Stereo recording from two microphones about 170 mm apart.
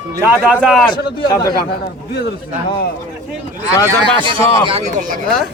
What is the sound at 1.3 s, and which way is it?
Speech, 20° left (ahead or behind).